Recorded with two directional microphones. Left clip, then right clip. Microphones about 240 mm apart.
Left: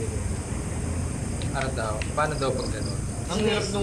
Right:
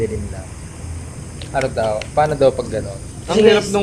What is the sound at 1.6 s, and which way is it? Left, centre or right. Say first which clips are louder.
A man's voice: right 12 dB; right.